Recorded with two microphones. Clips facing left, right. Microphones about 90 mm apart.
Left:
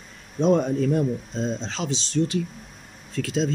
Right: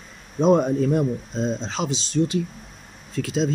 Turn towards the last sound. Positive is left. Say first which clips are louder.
# right 1 dB
turn(degrees=-20)  # may be behind; listen again after turning